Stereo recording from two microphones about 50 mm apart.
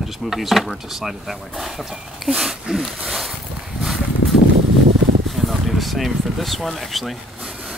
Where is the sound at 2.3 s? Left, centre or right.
Centre.